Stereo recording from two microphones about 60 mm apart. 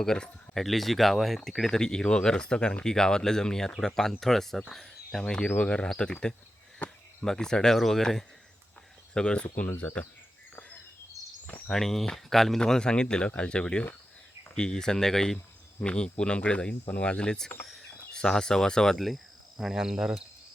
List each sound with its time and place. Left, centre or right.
0.0 s speech: centre
4.7 s a sound: centre
5.6 s speech: centre
6.7 s cricket: left
7.3 s speech: centre
9.1 s speech: centre
9.8 s speech: left
11.7 s speech: centre
17.7 s a sound: centre
18.9 s cricket: centre